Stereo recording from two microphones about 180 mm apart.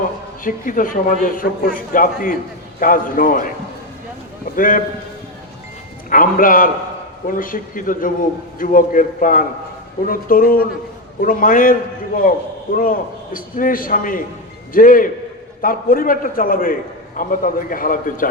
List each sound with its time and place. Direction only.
0.4 s a man's voice: 50° left (ahead or behind)
4.5 s a man's voice: 50° left (ahead or behind)
6.1 s a man's voice: 50° left (ahead or behind)